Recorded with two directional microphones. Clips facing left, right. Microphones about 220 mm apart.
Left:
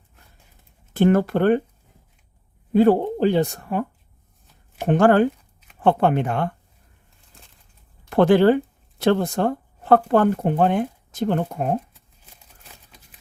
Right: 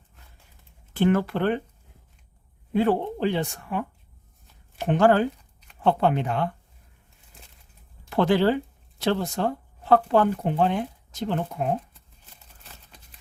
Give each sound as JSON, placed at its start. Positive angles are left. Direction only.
{"t": 0.9, "sound": "speech", "side_deg": 45}
{"t": 2.7, "sound": "speech", "side_deg": 40}
{"t": 8.1, "sound": "speech", "side_deg": 50}
{"t": 12.2, "sound": "a sound", "side_deg": 10}